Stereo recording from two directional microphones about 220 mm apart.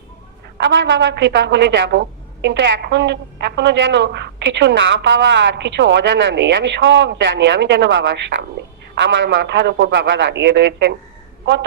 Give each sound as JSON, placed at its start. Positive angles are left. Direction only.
{"t": 0.6, "sound": "a woman's voice", "side_deg": -55}